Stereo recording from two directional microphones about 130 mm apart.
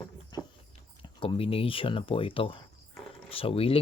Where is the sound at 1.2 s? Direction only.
45° left (ahead or behind).